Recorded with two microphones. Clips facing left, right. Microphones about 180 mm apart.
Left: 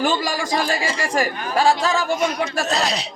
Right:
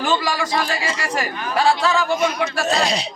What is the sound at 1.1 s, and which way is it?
Speech, 45° left (ahead or behind).